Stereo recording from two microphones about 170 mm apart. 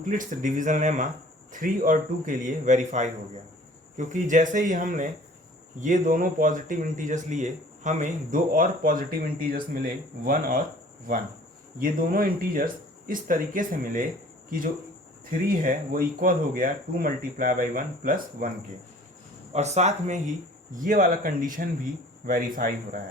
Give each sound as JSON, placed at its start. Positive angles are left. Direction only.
{"t": 0.0, "sound": "speech", "side_deg": -50}
{"t": 11.8, "sound": "speech", "side_deg": -55}
{"t": 15.3, "sound": "speech", "side_deg": -55}
{"t": 19.5, "sound": "speech", "side_deg": -40}